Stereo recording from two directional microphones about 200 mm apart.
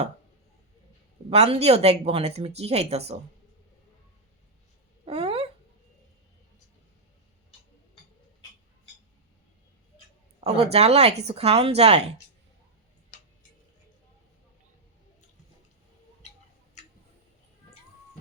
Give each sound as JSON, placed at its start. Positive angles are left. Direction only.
{"t": 1.3, "sound": "speech", "side_deg": -30}
{"t": 5.0, "sound": "a sound", "side_deg": -30}
{"t": 10.4, "sound": "speech", "side_deg": -30}